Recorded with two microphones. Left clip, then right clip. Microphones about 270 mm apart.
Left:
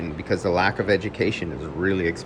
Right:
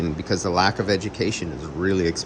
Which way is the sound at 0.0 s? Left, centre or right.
Centre.